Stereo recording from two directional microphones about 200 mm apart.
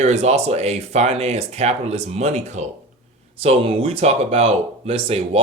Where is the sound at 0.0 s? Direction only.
35° right (ahead or behind).